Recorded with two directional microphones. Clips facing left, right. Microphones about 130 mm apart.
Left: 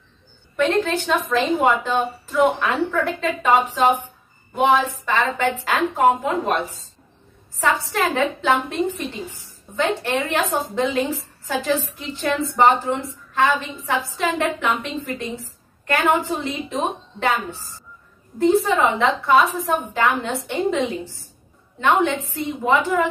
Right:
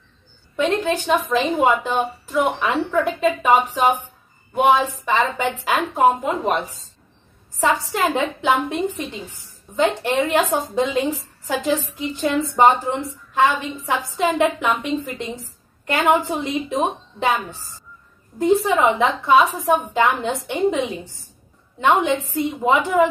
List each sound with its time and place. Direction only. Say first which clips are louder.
0.6 s a woman's voice: even; 15° right (ahead or behind)
12.2 s a woman's voice: right 1 dB; 15° right (ahead or behind)